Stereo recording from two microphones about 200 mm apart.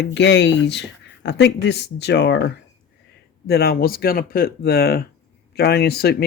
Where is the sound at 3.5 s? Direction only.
50° left (ahead or behind).